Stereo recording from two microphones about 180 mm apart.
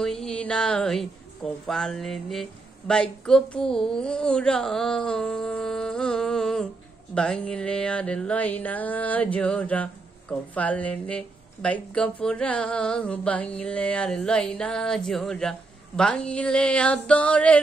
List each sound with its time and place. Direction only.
0.0 s a woman's voice: 5° left (ahead or behind)
7.2 s music: 5° left (ahead or behind)
10.5 s a woman's voice: 10° left (ahead or behind)